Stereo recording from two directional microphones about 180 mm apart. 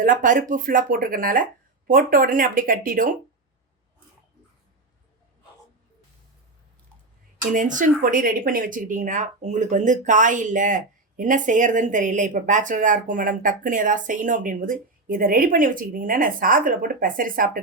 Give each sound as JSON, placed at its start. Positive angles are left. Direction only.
{"t": 0.0, "sound": "speech", "side_deg": -50}
{"t": 7.5, "sound": "speech", "side_deg": -45}